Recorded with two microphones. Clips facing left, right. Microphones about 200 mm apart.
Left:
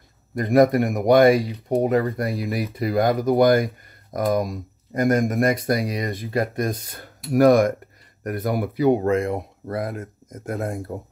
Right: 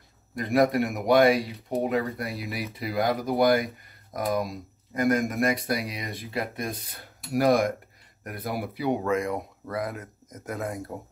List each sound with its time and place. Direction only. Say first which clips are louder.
0.4 s speech: left 6 dB; 45° left (ahead or behind)
9.1 s speech: left 4 dB; 30° left (ahead or behind)
9.8 s speech: left 3 dB; 50° left (ahead or behind)